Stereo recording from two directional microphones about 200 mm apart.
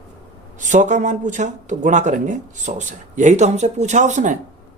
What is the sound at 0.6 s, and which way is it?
Speech, 40° right (ahead or behind).